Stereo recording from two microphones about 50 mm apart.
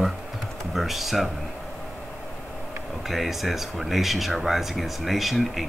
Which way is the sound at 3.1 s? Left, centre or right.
Centre.